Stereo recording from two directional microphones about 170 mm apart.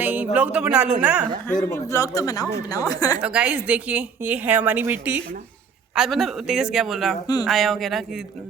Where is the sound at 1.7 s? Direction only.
20° left (ahead or behind).